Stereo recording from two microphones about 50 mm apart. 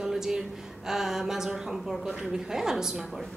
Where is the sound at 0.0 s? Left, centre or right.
Centre.